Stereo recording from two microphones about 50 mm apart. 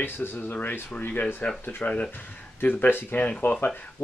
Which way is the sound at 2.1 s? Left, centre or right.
Left.